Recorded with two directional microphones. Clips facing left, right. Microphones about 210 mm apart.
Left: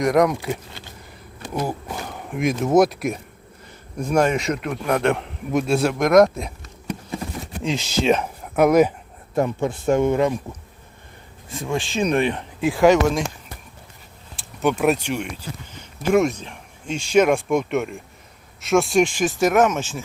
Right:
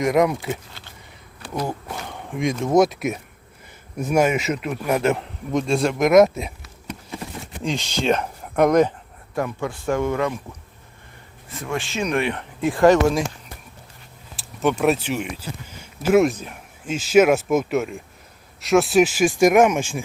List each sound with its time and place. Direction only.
0.0 s a man's voice: centre (ahead or behind)
1.6 s a man's voice: 5° left (ahead or behind)
9.3 s speech: 25° left (ahead or behind)
11.5 s speech: 15° left (ahead or behind)
11.9 s speech: 35° left (ahead or behind)
12.6 s a man's voice: centre (ahead or behind)
14.3 s speech: centre (ahead or behind)